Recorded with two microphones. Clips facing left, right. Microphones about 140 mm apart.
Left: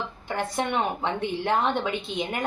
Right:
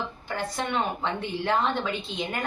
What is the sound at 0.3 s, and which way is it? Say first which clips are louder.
A woman's voice: left 2 dB; 20° left (ahead or behind).